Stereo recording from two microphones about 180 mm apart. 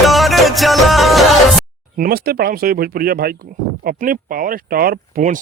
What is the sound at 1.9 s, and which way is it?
Speech, 55° right (ahead or behind).